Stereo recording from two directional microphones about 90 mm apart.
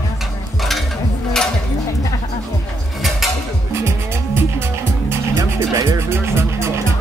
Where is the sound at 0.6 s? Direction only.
Centre (ahead or behind).